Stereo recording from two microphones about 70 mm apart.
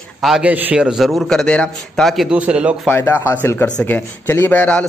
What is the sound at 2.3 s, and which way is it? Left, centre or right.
Speech, centre.